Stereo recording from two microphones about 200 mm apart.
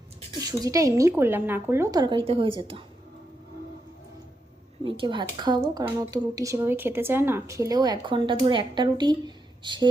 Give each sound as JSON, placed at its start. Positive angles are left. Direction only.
{"t": 0.3, "sound": "speech", "side_deg": -20}
{"t": 4.8, "sound": "speech", "side_deg": -25}